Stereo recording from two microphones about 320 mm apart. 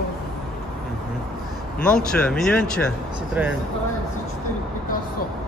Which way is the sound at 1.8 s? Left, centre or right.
Centre.